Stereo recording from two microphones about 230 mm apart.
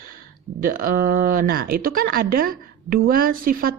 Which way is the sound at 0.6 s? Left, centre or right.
Right.